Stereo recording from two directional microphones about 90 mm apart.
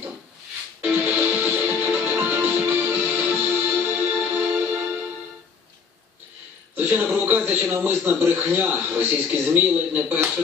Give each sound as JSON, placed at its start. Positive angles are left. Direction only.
{"t": 0.7, "sound": "music", "side_deg": -20}
{"t": 6.7, "sound": "a man's voice", "side_deg": -20}